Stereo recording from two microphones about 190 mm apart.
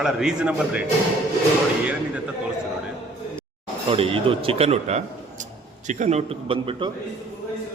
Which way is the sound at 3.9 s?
30° right (ahead or behind).